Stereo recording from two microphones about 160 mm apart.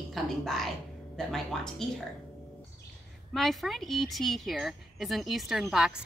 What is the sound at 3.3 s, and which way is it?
Speech, centre (ahead or behind).